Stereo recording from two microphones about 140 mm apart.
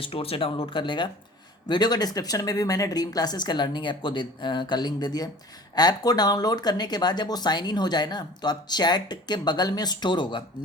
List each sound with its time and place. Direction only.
0.0 s speech: 40° left (ahead or behind)